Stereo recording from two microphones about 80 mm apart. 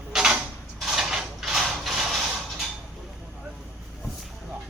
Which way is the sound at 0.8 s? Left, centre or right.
Centre.